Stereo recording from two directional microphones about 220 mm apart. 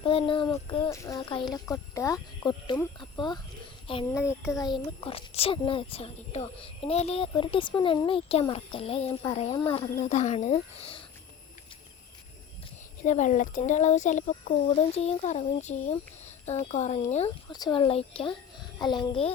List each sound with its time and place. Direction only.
0.0 s a child's voice: 25° left (ahead or behind)
13.0 s a child's voice: 35° left (ahead or behind)